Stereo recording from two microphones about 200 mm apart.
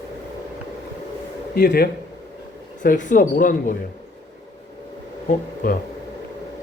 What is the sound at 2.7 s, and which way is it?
Speech, 40° left (ahead or behind).